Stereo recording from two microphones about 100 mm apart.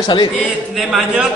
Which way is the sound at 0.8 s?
5° right (ahead or behind).